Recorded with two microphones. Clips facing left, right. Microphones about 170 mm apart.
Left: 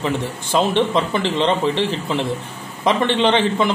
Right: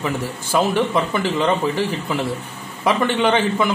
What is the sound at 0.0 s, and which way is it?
Speech, 20° left (ahead or behind).